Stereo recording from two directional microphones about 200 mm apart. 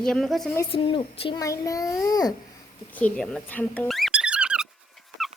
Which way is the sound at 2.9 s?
5° left (ahead or behind).